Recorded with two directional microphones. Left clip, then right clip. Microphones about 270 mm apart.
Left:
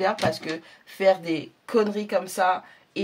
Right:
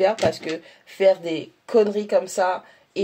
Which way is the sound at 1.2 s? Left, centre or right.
Centre.